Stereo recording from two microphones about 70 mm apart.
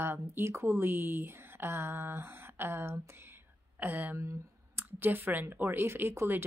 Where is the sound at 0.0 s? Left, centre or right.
Right.